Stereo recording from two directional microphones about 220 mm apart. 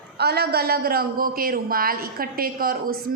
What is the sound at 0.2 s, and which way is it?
A woman's voice, 45° right (ahead or behind).